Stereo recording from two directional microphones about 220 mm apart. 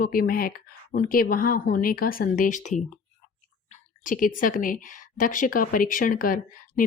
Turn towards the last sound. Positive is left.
turn(degrees=40)  # may be behind; listen again after turning